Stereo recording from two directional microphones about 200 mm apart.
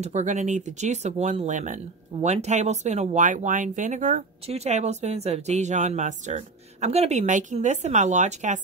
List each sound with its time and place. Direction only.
0.0 s speech: 35° right (ahead or behind)